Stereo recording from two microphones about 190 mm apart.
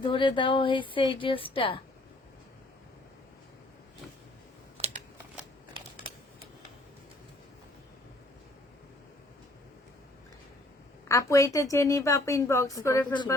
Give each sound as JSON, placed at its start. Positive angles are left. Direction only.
{"t": 0.0, "sound": "a woman's voice", "side_deg": 25}
{"t": 4.8, "sound": "computer keyboard", "side_deg": -30}
{"t": 11.1, "sound": "a woman's voice", "side_deg": 15}